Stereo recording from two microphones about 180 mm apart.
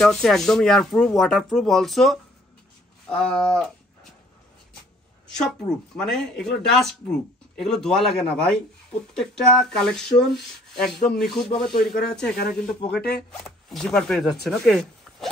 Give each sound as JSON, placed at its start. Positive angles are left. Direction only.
{"t": 0.0, "sound": "speech", "side_deg": 0}
{"t": 5.4, "sound": "speech", "side_deg": 5}
{"t": 13.4, "sound": "speech", "side_deg": 0}